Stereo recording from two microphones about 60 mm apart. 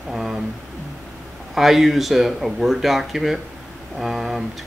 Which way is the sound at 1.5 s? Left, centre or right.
Centre.